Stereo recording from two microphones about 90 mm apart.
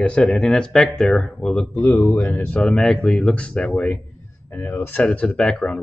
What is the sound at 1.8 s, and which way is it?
Speech, 25° left (ahead or behind).